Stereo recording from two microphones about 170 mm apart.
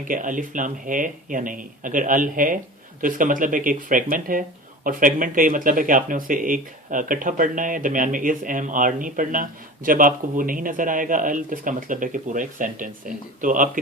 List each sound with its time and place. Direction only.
0.1 s speech: 50° right (ahead or behind)